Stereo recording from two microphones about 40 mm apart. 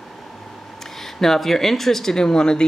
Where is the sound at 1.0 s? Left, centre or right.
Centre.